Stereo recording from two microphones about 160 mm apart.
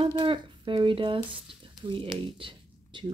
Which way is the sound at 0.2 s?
30° right (ahead or behind).